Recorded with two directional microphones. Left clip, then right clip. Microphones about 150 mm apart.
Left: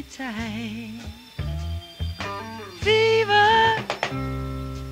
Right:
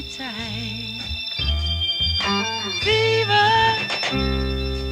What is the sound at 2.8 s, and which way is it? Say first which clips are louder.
Music: left 1 dB; 25° left (ahead or behind).